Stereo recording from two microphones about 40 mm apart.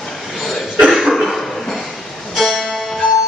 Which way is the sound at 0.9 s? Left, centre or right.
Centre.